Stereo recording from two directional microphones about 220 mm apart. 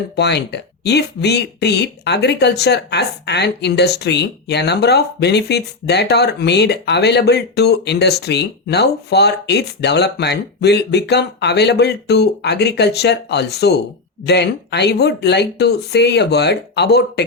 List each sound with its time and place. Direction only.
0.2 s speech: 50° left (ahead or behind)